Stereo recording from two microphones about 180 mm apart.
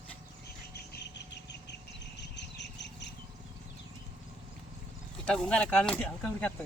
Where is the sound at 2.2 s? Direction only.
75° left (ahead or behind).